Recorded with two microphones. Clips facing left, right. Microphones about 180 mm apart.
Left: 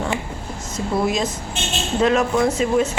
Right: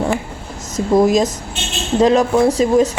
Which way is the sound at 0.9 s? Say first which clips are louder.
Right 8 dB; 40° right (ahead or behind).